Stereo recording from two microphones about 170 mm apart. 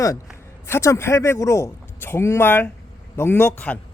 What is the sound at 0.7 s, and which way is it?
Speech, 15° left (ahead or behind).